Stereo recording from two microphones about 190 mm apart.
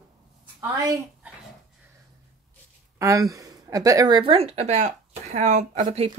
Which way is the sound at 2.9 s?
15° right (ahead or behind).